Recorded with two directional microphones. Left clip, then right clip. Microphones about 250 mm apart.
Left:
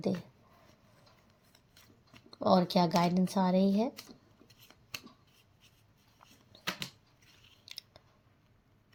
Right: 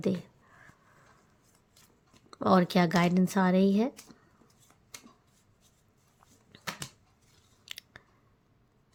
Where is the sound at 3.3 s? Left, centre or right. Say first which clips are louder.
Right 3 dB; right.